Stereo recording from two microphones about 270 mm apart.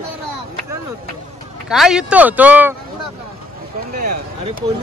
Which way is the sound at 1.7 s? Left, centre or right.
Centre.